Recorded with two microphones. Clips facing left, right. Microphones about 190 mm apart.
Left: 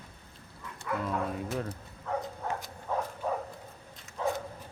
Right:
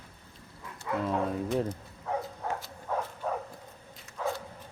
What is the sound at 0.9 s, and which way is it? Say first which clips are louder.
Dog: right 2 dB; 25° right (ahead or behind).